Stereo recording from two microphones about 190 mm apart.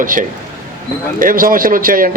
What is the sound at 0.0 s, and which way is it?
A man's voice, 45° right (ahead or behind).